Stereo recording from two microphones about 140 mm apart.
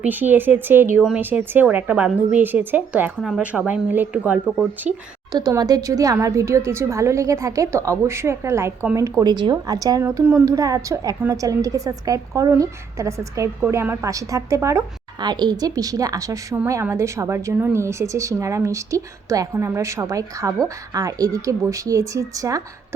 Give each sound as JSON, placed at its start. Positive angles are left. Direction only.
{"t": 0.0, "sound": "a woman's voice", "side_deg": -15}
{"t": 5.3, "sound": "speech", "side_deg": -30}
{"t": 10.2, "sound": "a woman's voice", "side_deg": -15}
{"t": 15.2, "sound": "speech", "side_deg": -30}